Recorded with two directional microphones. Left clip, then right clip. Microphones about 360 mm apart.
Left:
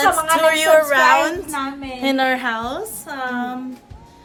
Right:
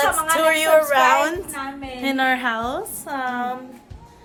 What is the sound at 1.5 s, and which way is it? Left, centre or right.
Speech, left.